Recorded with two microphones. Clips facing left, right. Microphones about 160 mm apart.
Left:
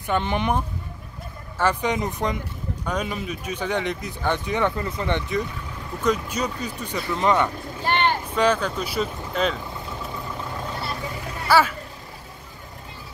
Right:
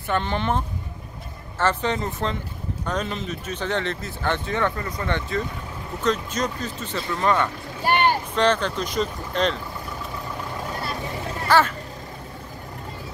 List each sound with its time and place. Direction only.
0.1 s speech: 15° left (ahead or behind)
7.8 s boat: 10° right (ahead or behind)
8.4 s speech: 10° left (ahead or behind)
11.4 s speech: 10° left (ahead or behind)